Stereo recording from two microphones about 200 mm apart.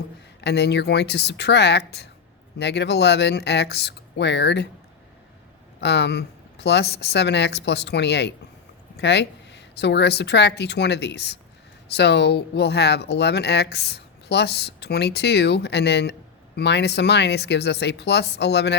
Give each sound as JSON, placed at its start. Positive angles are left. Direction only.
{"t": 0.4, "sound": "speech", "side_deg": 55}
{"t": 5.8, "sound": "speech", "side_deg": 60}